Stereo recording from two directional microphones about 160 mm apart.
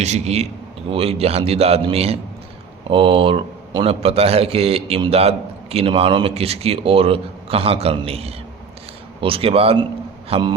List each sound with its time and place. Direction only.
0.0 s a man's voice: 40° right (ahead or behind)